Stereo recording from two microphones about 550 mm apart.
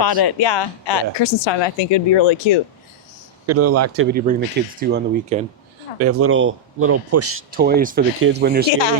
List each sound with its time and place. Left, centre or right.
0.0 s a woman's voice: left
3.4 s speech: right
8.7 s a woman's voice: left